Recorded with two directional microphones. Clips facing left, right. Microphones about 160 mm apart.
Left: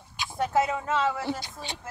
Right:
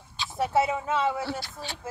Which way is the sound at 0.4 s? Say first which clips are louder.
Right 1 dB; 5° right (ahead or behind).